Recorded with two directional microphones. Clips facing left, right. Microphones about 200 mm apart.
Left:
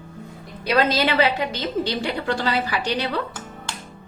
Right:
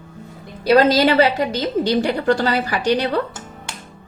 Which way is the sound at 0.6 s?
40° right (ahead or behind).